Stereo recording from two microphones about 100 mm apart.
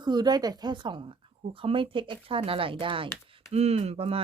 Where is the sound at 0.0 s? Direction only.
45° right (ahead or behind).